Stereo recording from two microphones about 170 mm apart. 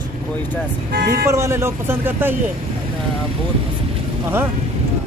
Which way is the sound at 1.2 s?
15° right (ahead or behind).